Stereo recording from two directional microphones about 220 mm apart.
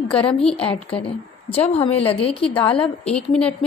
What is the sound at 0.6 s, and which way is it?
A woman's voice, 25° left (ahead or behind).